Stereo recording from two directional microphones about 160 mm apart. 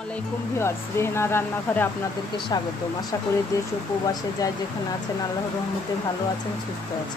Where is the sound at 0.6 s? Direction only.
15° left (ahead or behind).